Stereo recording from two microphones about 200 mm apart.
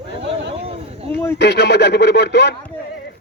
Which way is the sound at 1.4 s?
55° left (ahead or behind).